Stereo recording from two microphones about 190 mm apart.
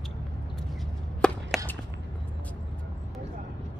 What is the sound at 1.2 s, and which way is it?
Chop, 5° left (ahead or behind).